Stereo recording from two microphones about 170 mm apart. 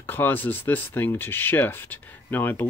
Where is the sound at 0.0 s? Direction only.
10° left (ahead or behind).